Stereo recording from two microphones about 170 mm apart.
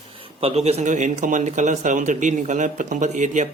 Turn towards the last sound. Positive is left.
turn(degrees=-45)  # may be behind; listen again after turning